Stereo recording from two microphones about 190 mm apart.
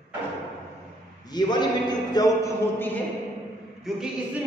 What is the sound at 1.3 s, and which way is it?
A man's voice, 20° left (ahead or behind).